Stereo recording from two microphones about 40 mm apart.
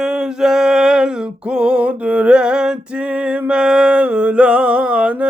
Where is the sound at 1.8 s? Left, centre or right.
Right.